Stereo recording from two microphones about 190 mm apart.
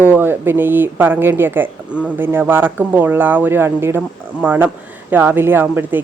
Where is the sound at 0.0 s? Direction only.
10° right (ahead or behind).